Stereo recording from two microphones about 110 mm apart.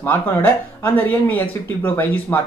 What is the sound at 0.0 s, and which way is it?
Speech, 15° left (ahead or behind).